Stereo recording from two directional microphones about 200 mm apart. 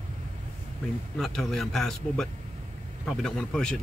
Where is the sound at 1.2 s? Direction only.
Centre (ahead or behind).